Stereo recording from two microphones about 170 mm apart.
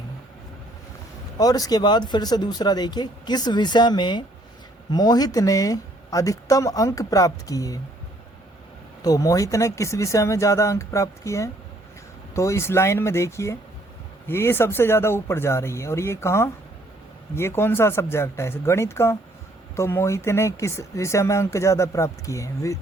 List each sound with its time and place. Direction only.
1.4 s speech: 20° left (ahead or behind)
9.0 s speech: 20° left (ahead or behind)